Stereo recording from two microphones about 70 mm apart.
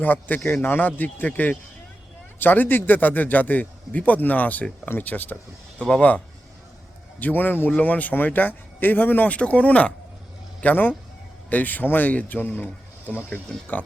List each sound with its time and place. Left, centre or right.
0.0 s speech: left